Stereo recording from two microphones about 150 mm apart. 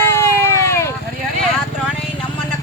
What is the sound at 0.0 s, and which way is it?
Vehicle, 15° left (ahead or behind).